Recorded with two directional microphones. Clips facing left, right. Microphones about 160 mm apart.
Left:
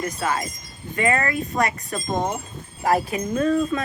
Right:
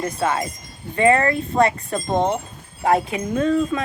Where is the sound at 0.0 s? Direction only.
25° right (ahead or behind).